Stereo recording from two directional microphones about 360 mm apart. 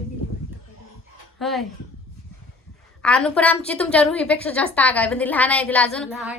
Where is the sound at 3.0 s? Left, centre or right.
Centre.